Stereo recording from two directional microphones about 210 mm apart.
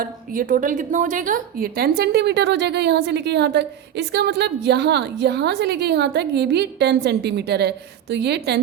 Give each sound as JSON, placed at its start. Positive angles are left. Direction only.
{"t": 0.0, "sound": "a woman's voice", "side_deg": -40}